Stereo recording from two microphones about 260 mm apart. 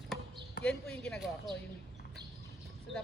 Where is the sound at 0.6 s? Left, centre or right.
Centre.